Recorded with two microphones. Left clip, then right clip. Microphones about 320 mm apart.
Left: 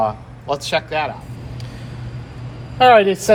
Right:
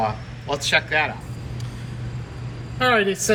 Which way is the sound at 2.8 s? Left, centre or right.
Centre.